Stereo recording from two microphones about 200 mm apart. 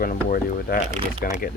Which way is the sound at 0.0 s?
45° left (ahead or behind).